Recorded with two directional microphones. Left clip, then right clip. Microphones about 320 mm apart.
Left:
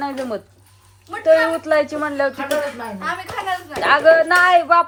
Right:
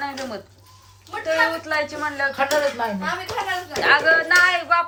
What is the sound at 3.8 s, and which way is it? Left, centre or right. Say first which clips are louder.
Speech: left 4 dB; centre.